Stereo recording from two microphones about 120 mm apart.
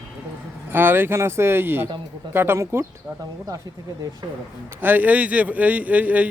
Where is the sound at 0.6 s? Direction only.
15° right (ahead or behind).